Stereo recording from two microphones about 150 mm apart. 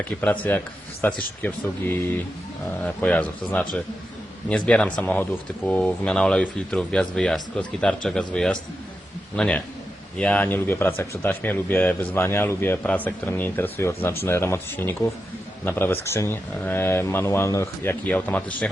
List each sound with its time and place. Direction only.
0.2 s speech: 10° left (ahead or behind)